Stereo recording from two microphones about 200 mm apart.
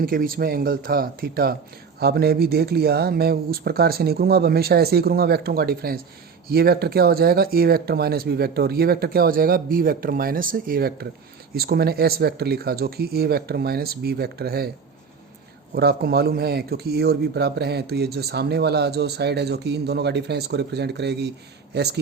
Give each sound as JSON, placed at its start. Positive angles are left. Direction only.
{"t": 0.0, "sound": "speech", "side_deg": -45}
{"t": 15.7, "sound": "speech", "side_deg": -50}